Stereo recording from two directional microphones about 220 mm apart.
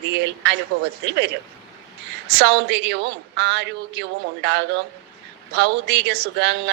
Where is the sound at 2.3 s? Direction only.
50° right (ahead or behind).